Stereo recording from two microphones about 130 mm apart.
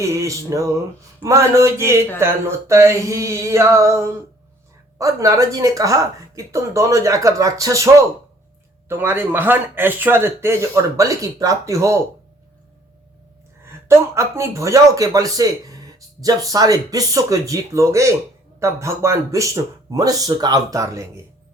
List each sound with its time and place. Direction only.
0.0 s speech: 20° right (ahead or behind)
8.9 s speech: 20° right (ahead or behind)
13.8 s speech: 20° right (ahead or behind)